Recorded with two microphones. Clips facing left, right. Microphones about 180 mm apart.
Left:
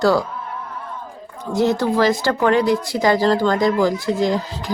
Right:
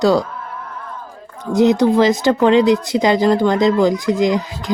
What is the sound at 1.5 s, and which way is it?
Speech, 20° right (ahead or behind).